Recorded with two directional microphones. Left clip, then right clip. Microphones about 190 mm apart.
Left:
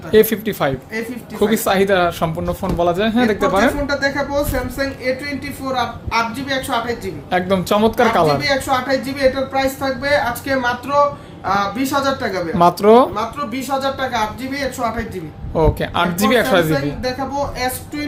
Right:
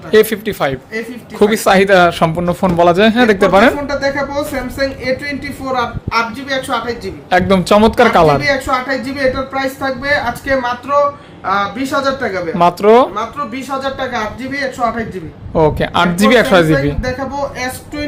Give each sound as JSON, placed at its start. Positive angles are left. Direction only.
{"t": 0.1, "sound": "speech", "side_deg": -25}
{"t": 3.8, "sound": "speech", "side_deg": -10}
{"t": 7.3, "sound": "speech", "side_deg": -25}
{"t": 8.4, "sound": "speech", "side_deg": -10}
{"t": 11.4, "sound": "speech", "side_deg": 5}
{"t": 12.6, "sound": "speech", "side_deg": -10}
{"t": 15.5, "sound": "speech", "side_deg": -15}
{"t": 17.0, "sound": "speech", "side_deg": -5}